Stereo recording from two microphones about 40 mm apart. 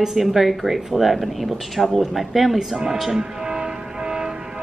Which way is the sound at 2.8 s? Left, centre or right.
Centre.